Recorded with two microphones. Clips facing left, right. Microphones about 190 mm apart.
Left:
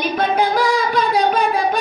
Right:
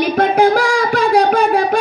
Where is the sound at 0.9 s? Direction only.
75° right (ahead or behind).